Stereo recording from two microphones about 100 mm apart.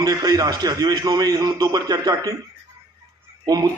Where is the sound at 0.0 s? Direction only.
40° right (ahead or behind).